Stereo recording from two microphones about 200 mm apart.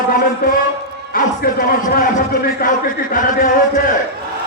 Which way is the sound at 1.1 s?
45° left (ahead or behind).